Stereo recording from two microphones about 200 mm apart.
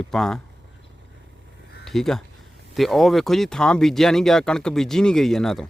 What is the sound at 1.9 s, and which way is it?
Speech, centre (ahead or behind).